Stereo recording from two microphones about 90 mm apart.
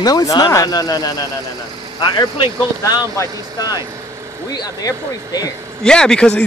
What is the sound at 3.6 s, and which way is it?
Speech, 45° left (ahead or behind).